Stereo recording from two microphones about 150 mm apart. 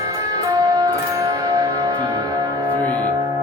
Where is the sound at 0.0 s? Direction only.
25° right (ahead or behind).